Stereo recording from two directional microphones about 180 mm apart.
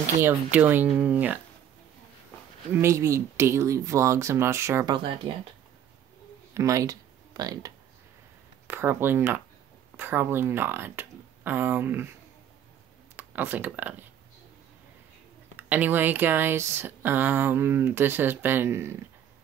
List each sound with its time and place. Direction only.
0.0 s speech: 10° right (ahead or behind)
2.7 s speech: 15° right (ahead or behind)
4.9 s speech: 25° right (ahead or behind)
6.5 s speech: 15° right (ahead or behind)
13.1 s speech: 10° right (ahead or behind)
15.5 s speech: 10° right (ahead or behind)